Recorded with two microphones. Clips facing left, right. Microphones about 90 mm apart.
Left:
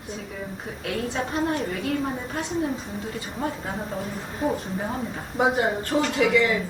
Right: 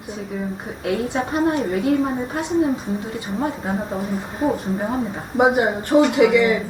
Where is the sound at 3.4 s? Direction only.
20° right (ahead or behind).